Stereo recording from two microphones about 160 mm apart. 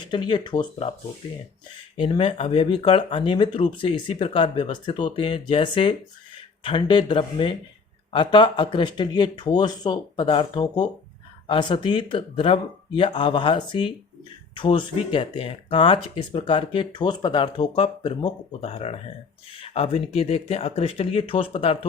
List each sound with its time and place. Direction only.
0.1 s speech: 30° left (ahead or behind)
2.0 s speech: 35° left (ahead or behind)